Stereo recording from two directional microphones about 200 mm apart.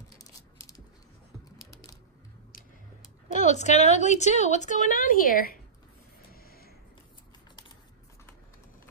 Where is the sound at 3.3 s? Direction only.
35° left (ahead or behind).